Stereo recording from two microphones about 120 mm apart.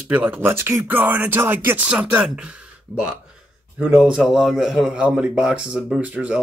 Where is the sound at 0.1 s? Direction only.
15° right (ahead or behind).